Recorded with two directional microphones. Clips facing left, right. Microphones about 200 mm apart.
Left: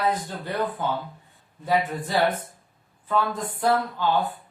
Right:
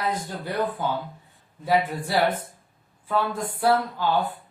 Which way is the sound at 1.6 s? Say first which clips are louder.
Right 1 dB; 10° right (ahead or behind).